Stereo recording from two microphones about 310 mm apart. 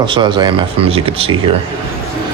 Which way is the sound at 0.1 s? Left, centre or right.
Centre.